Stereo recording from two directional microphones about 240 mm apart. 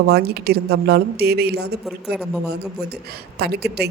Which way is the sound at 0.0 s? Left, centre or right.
Right.